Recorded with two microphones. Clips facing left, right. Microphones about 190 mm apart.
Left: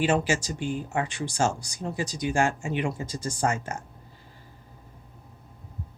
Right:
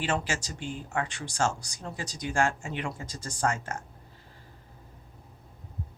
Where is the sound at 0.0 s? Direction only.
10° left (ahead or behind).